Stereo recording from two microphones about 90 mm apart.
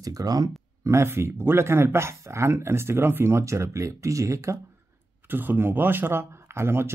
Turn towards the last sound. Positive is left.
turn(degrees=-30)  # may be behind; listen again after turning